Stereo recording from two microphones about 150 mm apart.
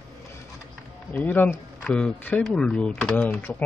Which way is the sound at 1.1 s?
10° left (ahead or behind).